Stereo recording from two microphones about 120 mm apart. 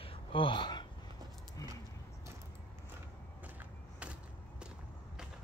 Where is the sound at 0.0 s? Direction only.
50° left (ahead or behind).